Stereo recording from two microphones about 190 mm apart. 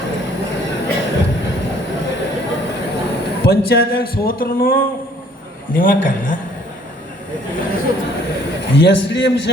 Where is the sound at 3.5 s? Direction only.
55° left (ahead or behind).